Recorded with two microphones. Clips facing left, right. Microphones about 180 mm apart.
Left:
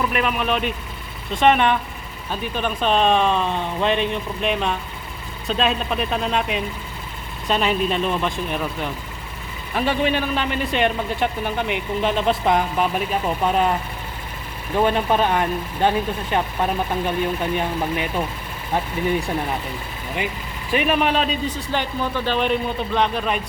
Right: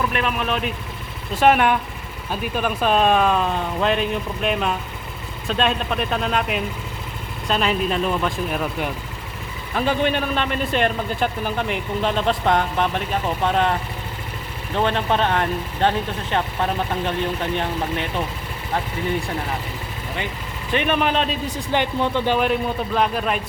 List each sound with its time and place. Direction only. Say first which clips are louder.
0.1 s speech: left 1 dB; 5° left (ahead or behind)
14.8 s speech: left 2 dB; 10° left (ahead or behind)
20.7 s speech: left 1 dB; 5° left (ahead or behind)
21.4 s speech: right 2 dB; 15° right (ahead or behind)
23.0 s speech: even; 5° right (ahead or behind)